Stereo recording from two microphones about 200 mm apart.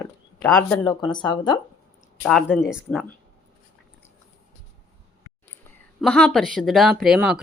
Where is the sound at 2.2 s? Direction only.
Centre (ahead or behind).